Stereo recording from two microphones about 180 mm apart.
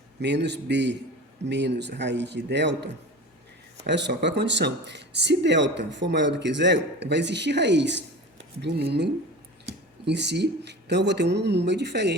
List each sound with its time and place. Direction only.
0.2 s speech: 75° right (ahead or behind)